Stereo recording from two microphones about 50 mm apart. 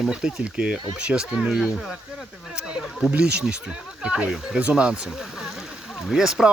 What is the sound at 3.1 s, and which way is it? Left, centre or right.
Speech, right.